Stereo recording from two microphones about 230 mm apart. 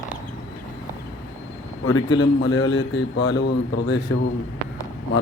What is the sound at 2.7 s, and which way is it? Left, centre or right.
Mantra, left.